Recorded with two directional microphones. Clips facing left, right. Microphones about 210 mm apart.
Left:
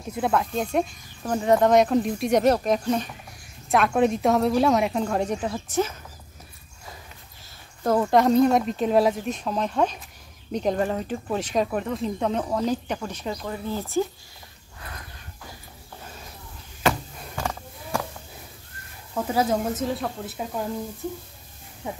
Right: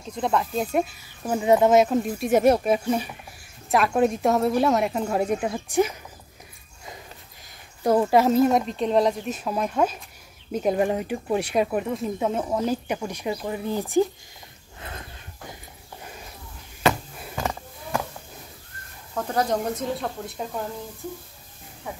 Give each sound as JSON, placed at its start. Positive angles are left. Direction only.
{"t": 0.1, "sound": "speech", "side_deg": 5}
{"t": 7.8, "sound": "speech", "side_deg": -10}
{"t": 14.8, "sound": "a sound", "side_deg": -25}
{"t": 19.1, "sound": "speech", "side_deg": 5}
{"t": 21.8, "sound": "speech", "side_deg": 20}